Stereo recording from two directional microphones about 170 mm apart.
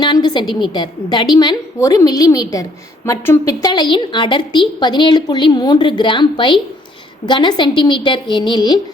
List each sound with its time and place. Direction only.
0.0 s a woman's voice: 25° left (ahead or behind)